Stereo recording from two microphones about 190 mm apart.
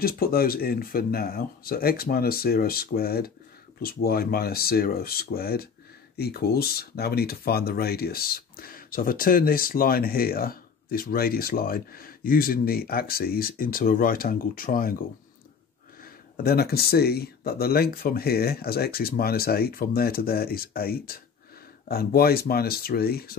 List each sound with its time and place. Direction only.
0.0 s speech: 50° left (ahead or behind)
16.0 s speech: 55° left (ahead or behind)